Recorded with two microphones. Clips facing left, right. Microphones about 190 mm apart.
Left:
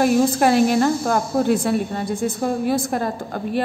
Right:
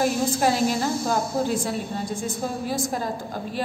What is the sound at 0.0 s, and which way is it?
Speech, 65° left (ahead or behind).